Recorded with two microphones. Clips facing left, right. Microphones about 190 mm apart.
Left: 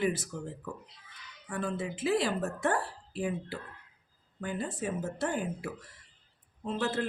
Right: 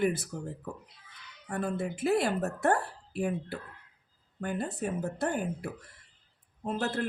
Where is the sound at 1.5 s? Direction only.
55° right (ahead or behind).